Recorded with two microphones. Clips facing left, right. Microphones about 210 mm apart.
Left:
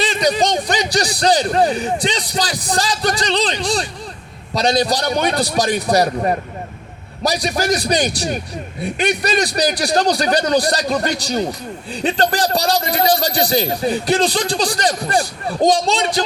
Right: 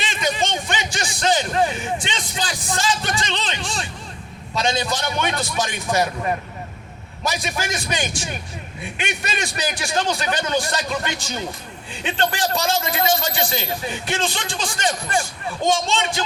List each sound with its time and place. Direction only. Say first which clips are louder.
0.0 s a man's voice: left 7 dB; 35° left (ahead or behind)